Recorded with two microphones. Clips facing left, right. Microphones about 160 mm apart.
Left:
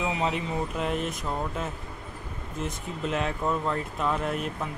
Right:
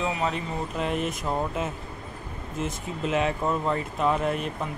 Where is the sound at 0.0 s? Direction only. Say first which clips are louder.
Even; 20° left (ahead or behind).